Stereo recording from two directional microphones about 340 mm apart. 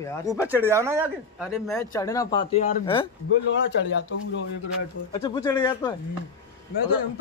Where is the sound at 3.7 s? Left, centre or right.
Left.